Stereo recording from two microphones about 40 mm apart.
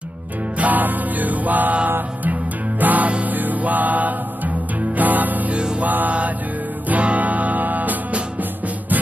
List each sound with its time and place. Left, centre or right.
0.6 s music: right
1.9 s music: right
2.8 s music: right
5.5 s music: right
5.8 s music: right